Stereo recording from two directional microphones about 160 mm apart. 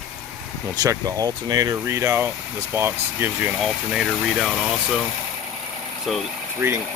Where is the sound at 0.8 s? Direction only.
25° right (ahead or behind).